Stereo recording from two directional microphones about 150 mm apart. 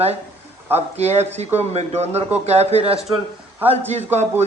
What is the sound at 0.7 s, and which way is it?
A man's voice, 45° right (ahead or behind).